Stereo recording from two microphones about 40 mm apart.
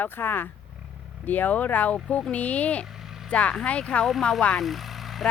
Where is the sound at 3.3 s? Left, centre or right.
Left.